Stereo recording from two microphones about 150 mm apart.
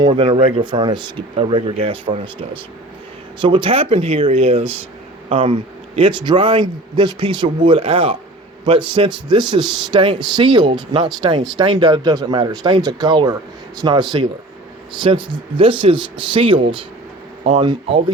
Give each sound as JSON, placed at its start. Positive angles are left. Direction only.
{"t": 0.0, "sound": "a man's voice", "side_deg": -35}